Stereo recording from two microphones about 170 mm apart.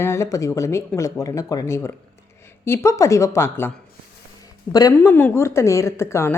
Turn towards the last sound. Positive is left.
turn(degrees=15)  # may be behind; listen again after turning